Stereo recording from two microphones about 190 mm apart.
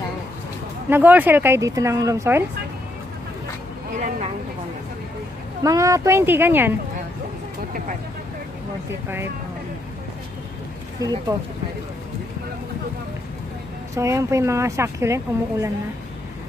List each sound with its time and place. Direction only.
0.8 s speech: 10° right (ahead or behind)
5.6 s speech: 15° right (ahead or behind)
11.0 s speech: 20° right (ahead or behind)
13.9 s speech: 15° right (ahead or behind)